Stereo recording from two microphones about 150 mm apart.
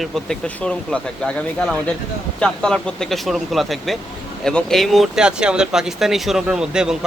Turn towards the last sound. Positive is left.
turn(degrees=-5)  # may be behind; listen again after turning